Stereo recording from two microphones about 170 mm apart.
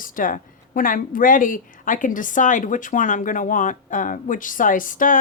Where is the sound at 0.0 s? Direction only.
55° left (ahead or behind).